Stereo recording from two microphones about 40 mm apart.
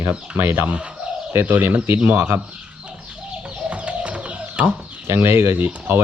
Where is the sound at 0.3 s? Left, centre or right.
Right.